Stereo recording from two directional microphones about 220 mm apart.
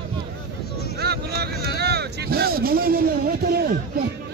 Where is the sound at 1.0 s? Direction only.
45° right (ahead or behind).